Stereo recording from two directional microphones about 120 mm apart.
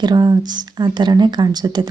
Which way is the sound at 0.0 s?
40° right (ahead or behind).